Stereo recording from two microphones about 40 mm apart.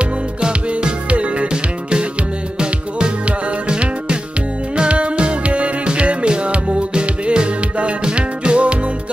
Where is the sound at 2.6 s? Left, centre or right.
Right.